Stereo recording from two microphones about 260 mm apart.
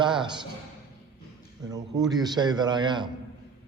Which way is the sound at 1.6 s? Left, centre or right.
Centre.